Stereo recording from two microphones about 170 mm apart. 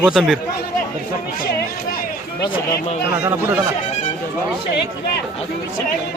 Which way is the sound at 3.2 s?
15° right (ahead or behind).